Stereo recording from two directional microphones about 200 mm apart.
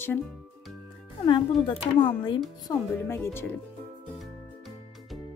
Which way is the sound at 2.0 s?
25° left (ahead or behind).